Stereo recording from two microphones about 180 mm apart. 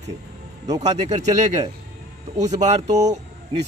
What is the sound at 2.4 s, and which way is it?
Speech, 40° right (ahead or behind).